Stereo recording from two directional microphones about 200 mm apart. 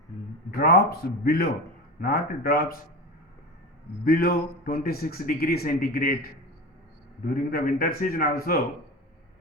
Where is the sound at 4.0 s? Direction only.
50° left (ahead or behind).